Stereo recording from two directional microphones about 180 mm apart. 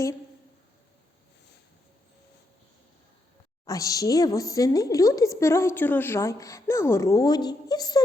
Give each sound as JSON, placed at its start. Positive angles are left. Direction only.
{"t": 3.7, "sound": "a woman's voice", "side_deg": 20}